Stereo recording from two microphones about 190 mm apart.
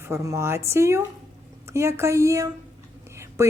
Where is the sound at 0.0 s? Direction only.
15° right (ahead or behind).